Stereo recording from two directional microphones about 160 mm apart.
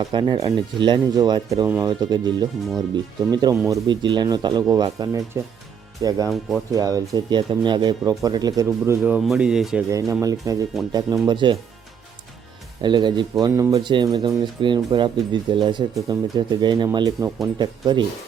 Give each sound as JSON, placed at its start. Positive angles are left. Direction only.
{"t": 0.1, "sound": "speech", "side_deg": -30}
{"t": 3.5, "sound": "speech", "side_deg": -15}
{"t": 3.8, "sound": "speech", "side_deg": -30}
{"t": 9.1, "sound": "speech", "side_deg": -5}
{"t": 9.9, "sound": "speech", "side_deg": -20}
{"t": 12.8, "sound": "speech", "side_deg": -30}